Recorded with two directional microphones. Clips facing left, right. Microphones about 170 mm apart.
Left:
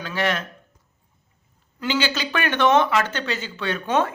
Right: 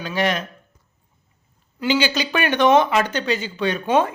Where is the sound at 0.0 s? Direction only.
15° right (ahead or behind).